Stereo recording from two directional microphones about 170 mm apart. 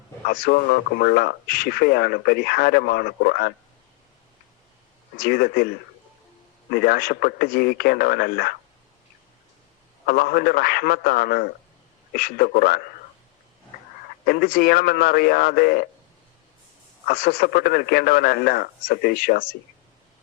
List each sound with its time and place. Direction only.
0.3 s speech: 60° left (ahead or behind)
5.1 s speech: 60° left (ahead or behind)
6.7 s speech: 65° left (ahead or behind)
10.1 s speech: 60° left (ahead or behind)
14.3 s speech: 60° left (ahead or behind)
17.1 s speech: 60° left (ahead or behind)